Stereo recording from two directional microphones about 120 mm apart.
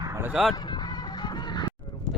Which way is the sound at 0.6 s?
35° left (ahead or behind).